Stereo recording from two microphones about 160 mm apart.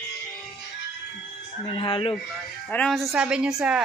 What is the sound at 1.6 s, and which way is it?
Speech, 30° left (ahead or behind).